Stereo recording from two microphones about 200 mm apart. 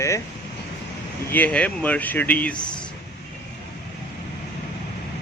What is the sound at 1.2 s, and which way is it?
Speech, 10° left (ahead or behind).